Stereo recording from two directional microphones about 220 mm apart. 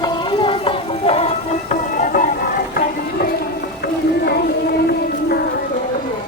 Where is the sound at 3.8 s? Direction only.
45° left (ahead or behind).